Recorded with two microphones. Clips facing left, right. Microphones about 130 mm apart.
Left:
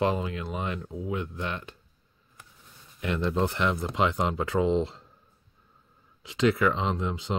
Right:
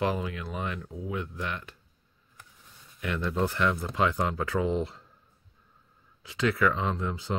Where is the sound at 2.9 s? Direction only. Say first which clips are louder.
Left 2 dB; 25° left (ahead or behind).